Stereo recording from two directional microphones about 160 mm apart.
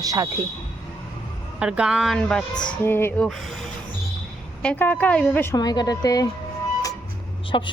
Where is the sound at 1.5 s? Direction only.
5° right (ahead or behind).